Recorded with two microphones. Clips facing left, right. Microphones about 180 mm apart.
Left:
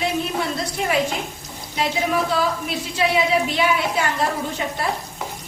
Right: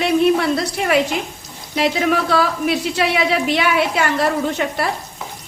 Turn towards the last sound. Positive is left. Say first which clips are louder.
# right 5 dB
turn(degrees=-75)  # may be behind; listen again after turning